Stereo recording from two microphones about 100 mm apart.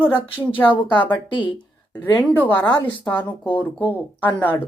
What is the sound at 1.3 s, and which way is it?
Speech, 55° left (ahead or behind).